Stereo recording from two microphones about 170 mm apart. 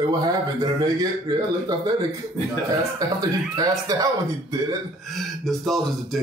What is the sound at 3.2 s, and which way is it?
Speech, 20° right (ahead or behind).